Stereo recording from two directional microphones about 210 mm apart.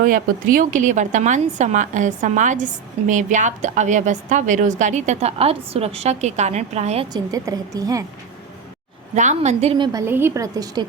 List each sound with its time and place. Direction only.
0.0 s a woman's voice: 40° right (ahead or behind); by 8.0 s 15° right (ahead or behind)
9.1 s a woman's voice: 35° right (ahead or behind); by 10.8 s 15° right (ahead or behind)